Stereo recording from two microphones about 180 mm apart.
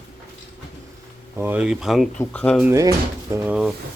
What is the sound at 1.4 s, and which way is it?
Speech, 10° right (ahead or behind).